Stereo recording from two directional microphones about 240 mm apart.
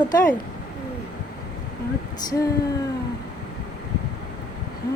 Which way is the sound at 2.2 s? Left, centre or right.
Centre.